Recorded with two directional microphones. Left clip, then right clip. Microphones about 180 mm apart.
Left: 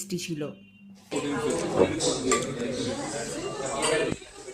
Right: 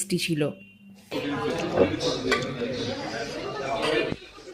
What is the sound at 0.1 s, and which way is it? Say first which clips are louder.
Speech: right 7 dB; 20° right (ahead or behind).